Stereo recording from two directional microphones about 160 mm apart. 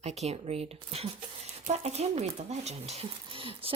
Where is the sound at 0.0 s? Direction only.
45° right (ahead or behind).